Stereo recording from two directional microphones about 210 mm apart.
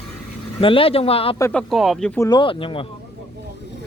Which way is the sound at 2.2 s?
20° left (ahead or behind).